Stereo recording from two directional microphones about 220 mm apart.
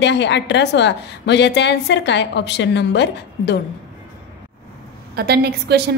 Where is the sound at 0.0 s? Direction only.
50° left (ahead or behind).